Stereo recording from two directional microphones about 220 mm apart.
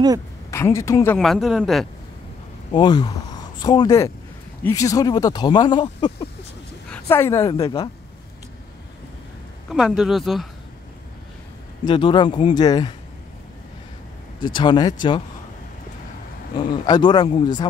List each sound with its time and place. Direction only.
0.5 s a man's voice: 10° left (ahead or behind)
2.7 s a woman's voice: 20° left (ahead or behind)
9.7 s a man's voice: centre (ahead or behind)
11.8 s speech: 20° left (ahead or behind)
14.4 s speech: 20° left (ahead or behind)
16.5 s speech: 20° left (ahead or behind)